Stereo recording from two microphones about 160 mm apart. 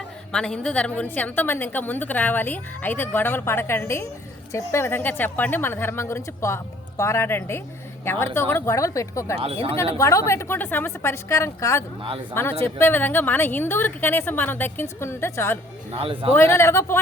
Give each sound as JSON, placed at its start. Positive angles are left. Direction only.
{"t": 0.3, "sound": "a woman's voice", "side_deg": 5}
{"t": 9.4, "sound": "speech", "side_deg": -35}
{"t": 9.7, "sound": "a woman's voice", "side_deg": 20}
{"t": 15.9, "sound": "speech", "side_deg": -35}
{"t": 16.3, "sound": "a woman's voice", "side_deg": 15}